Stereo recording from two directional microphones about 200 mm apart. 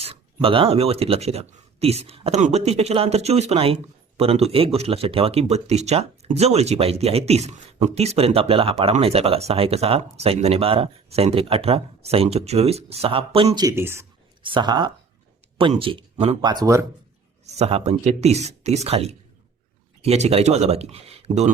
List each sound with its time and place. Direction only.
0.0 s speech: 25° right (ahead or behind)
13.7 s speech: 10° right (ahead or behind)
14.4 s speech: 25° right (ahead or behind)
16.4 s speech: 20° right (ahead or behind)
17.4 s speech: 30° right (ahead or behind)